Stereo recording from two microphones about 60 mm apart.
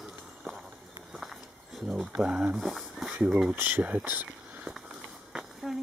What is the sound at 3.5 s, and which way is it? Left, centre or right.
Speech, right.